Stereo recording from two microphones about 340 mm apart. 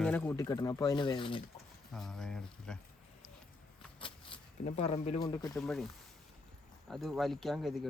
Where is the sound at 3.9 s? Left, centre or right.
Centre.